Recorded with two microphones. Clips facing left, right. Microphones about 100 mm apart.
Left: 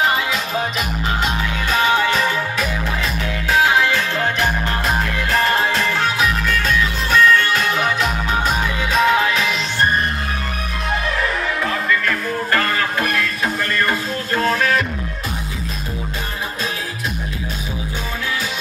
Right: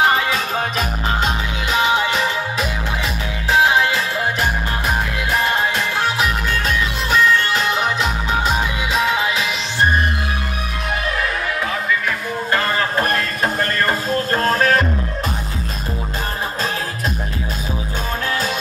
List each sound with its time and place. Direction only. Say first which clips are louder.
1.7 s music: even; 20° right (ahead or behind)
4.8 s music: even; 5° right (ahead or behind); by 6.7 s 30° right (ahead or behind)
7.1 s music: left 2 dB; 20° right (ahead or behind)
8.9 s music: left 4 dB; 5° right (ahead or behind)
11.1 s music: left 1 dB; 5° right (ahead or behind)
12.4 s music: right 1 dB; 20° right (ahead or behind)